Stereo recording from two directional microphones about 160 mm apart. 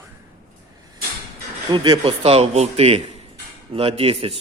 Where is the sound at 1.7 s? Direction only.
25° right (ahead or behind).